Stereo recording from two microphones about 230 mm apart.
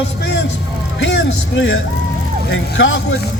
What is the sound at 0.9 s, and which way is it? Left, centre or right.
Vehicle, left.